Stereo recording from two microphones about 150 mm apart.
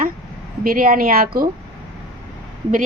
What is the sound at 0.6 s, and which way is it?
Speech, 80° right.